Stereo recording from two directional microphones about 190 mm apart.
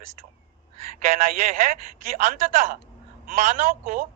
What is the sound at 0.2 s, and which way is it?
A woman's voice, 45° right (ahead or behind).